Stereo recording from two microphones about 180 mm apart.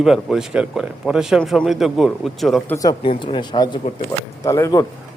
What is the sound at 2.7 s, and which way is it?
Speech, 25° left (ahead or behind).